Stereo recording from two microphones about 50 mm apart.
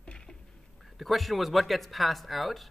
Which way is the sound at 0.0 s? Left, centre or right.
Centre.